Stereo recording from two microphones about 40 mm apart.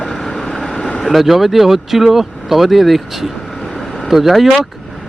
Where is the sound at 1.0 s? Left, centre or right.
Centre.